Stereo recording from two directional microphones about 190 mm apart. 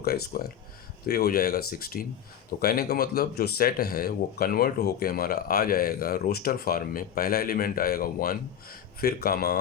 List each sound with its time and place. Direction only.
0.0 s speech: 50° left (ahead or behind)